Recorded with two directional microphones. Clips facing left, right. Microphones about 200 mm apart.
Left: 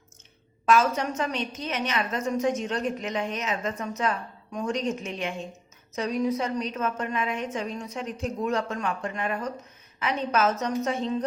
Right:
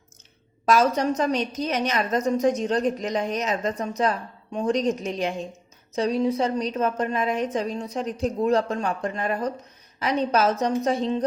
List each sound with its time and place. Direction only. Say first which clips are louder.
0.6 s a woman's voice: right 3 dB; 40° right (ahead or behind)